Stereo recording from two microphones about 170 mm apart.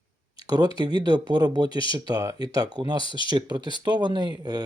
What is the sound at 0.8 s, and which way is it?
Speech, 25° right (ahead or behind).